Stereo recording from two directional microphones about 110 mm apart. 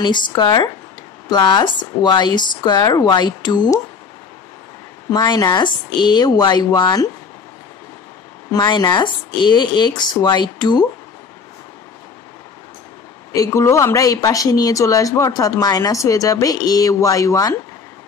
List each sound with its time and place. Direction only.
0.0 s speech: 45° left (ahead or behind)
5.1 s speech: 40° left (ahead or behind)
8.5 s speech: 40° left (ahead or behind)
13.3 s speech: 30° left (ahead or behind)